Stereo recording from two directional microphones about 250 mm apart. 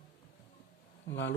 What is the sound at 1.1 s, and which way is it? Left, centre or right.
Speech, left.